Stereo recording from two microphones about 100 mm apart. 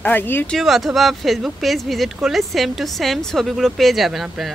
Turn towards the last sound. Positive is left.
turn(degrees=-5)  # may be behind; listen again after turning